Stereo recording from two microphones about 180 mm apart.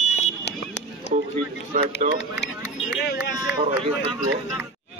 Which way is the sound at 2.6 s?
10° right (ahead or behind).